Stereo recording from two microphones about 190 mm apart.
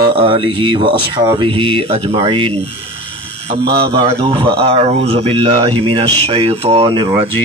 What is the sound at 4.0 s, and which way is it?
Speech, 30° right (ahead or behind).